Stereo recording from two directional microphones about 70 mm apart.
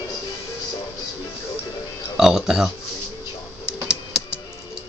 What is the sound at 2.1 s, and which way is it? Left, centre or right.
Speech, centre.